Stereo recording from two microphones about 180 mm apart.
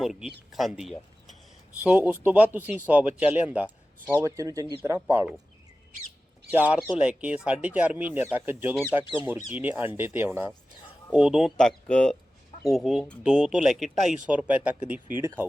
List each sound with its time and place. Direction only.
0.0 s speech: 5° right (ahead or behind); by 4.7 s 20° right (ahead or behind)
6.5 s speech: 10° right (ahead or behind)